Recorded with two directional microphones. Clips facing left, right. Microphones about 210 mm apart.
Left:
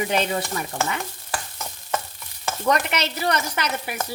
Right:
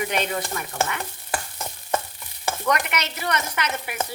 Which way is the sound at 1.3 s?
15° right (ahead or behind).